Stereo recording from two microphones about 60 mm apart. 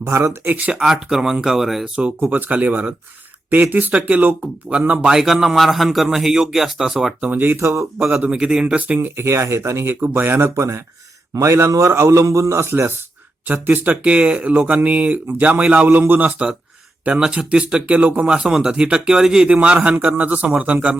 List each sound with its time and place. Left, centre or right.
0.0 s speech: right
0.4 s speech: right
0.7 s a man's voice: centre
2.2 s speech: right
5.0 s a man's voice: centre
7.2 s speech: right
7.9 s speech: right
8.3 s a man's voice: centre
9.0 s speech: right
13.5 s speech: right
17.1 s a man's voice: centre
18.3 s a man's voice: centre